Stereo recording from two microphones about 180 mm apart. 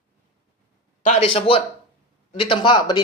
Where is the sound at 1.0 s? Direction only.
35° left (ahead or behind).